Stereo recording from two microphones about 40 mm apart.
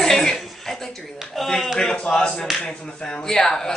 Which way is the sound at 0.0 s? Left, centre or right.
Centre.